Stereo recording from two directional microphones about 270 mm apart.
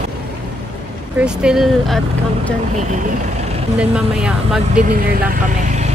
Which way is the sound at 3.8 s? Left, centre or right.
Centre.